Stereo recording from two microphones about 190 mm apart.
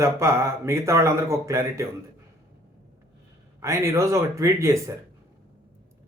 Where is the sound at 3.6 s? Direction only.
15° right (ahead or behind).